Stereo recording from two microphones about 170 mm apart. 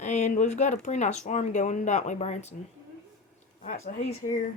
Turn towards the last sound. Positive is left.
turn(degrees=50)  # may be behind; listen again after turning